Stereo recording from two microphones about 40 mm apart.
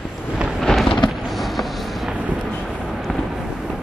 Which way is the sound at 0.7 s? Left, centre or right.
Centre.